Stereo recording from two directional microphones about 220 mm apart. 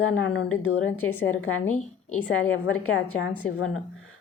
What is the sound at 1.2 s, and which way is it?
A woman's voice, 65° left (ahead or behind).